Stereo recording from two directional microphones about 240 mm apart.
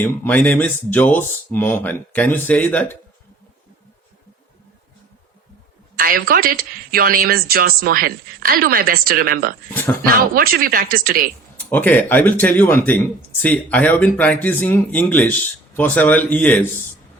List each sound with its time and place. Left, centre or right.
0.0 s speech: centre
6.0 s speech: right
9.6 s speech: centre
10.3 s speech: right
11.7 s speech: centre